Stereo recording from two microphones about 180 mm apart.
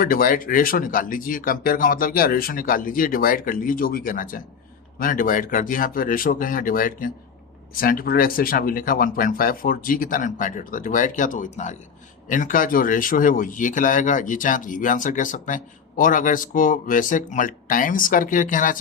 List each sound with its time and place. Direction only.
0.0 s speech: 50° left (ahead or behind)